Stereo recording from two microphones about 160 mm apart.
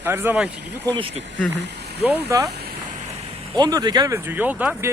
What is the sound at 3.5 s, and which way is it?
Speech, 25° right (ahead or behind).